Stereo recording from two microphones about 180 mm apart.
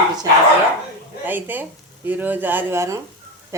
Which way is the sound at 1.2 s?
10° right (ahead or behind).